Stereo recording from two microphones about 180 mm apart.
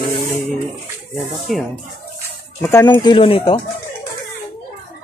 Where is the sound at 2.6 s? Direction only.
15° left (ahead or behind).